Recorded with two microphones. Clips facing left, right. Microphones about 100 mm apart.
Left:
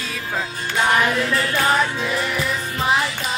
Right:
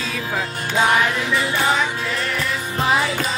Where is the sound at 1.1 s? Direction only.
5° right (ahead or behind).